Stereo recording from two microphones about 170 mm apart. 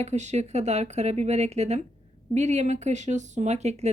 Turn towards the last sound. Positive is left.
turn(degrees=-40)  # may be behind; listen again after turning